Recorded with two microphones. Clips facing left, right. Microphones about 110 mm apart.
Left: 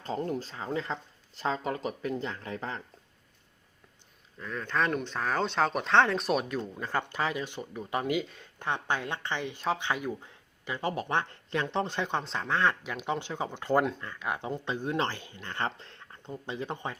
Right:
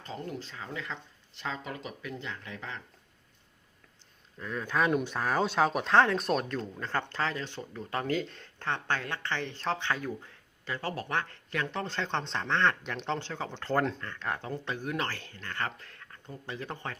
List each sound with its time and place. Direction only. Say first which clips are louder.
0.0 s speech: left 6 dB; 40° left (ahead or behind)
4.4 s speech: right 1 dB; 5° right (ahead or behind); by 17.0 s 20° left (ahead or behind)